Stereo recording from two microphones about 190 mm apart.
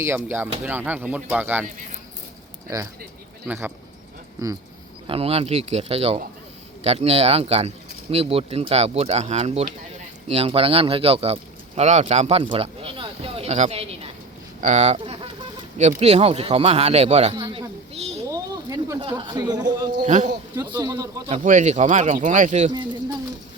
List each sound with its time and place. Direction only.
0.0 s speech: 10° right (ahead or behind)
2.6 s speech: 15° right (ahead or behind)
5.0 s speech: 30° right (ahead or behind)
17.3 s speech: 25° right (ahead or behind)
18.3 s a sound: 20° right (ahead or behind)
20.1 s speech: 40° right (ahead or behind)
20.6 s speech: 15° right (ahead or behind)
21.2 s speech: 35° right (ahead or behind)